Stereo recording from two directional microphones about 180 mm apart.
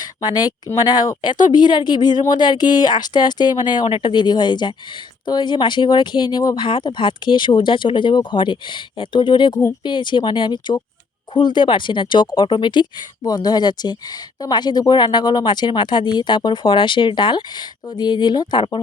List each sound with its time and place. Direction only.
0.0 s speech: 25° left (ahead or behind)